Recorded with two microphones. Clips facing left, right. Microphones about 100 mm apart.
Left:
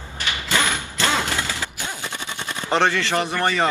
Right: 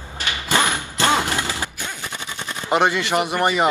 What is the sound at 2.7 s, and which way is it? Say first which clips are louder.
Speech: right 1 dB; 15° right (ahead or behind).